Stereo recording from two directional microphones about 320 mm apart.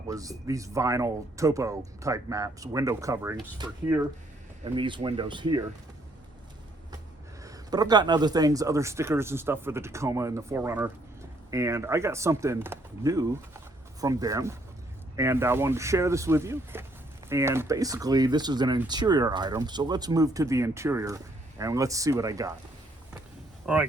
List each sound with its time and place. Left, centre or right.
0.1 s speech: centre
7.4 s speech: centre
23.6 s speech: centre